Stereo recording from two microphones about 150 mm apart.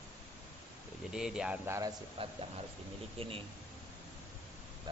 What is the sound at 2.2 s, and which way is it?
Speech, 40° right (ahead or behind).